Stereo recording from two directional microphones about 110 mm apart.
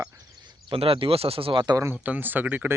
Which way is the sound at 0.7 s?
55° right (ahead or behind).